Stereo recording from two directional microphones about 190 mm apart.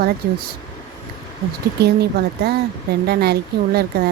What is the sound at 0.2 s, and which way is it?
Speech, 50° right (ahead or behind).